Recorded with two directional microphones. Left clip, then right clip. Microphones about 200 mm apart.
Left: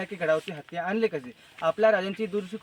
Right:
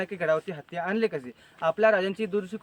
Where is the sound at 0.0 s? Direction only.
Centre (ahead or behind).